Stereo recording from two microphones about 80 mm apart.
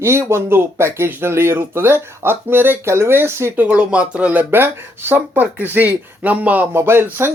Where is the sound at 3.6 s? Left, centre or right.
Centre.